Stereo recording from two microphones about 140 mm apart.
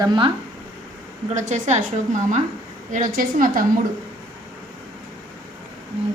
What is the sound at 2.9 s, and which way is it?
Speech, 70° right (ahead or behind).